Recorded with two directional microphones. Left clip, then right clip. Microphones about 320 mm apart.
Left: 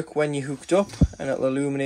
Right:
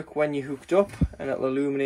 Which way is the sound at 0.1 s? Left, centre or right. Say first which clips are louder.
Even; left.